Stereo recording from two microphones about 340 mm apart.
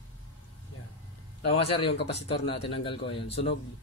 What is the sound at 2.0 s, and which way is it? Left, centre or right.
A man's voice, centre.